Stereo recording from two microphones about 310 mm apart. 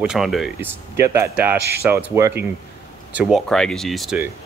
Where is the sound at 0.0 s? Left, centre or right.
Centre.